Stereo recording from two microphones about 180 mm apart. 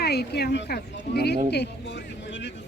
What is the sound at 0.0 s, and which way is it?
Speech, 65° left (ahead or behind).